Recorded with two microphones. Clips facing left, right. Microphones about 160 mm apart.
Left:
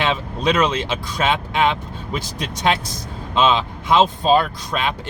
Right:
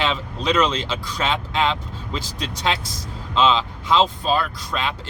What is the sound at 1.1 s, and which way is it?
Speech, 15° left (ahead or behind).